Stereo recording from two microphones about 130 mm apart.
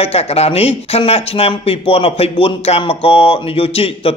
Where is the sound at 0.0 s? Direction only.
50° left (ahead or behind).